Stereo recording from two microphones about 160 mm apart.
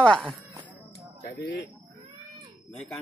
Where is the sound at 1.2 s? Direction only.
80° left.